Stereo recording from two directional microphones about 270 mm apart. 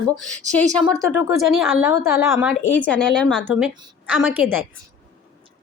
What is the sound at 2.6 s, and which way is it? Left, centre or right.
A woman's voice, centre.